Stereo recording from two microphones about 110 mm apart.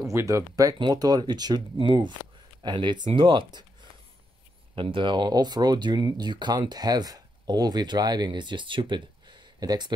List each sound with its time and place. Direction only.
0.1 s speech: 25° right (ahead or behind); by 3.6 s 50° right (ahead or behind)
4.7 s speech: 50° right (ahead or behind)